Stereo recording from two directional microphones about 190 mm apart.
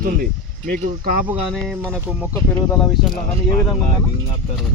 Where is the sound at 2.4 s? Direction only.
5° left (ahead or behind).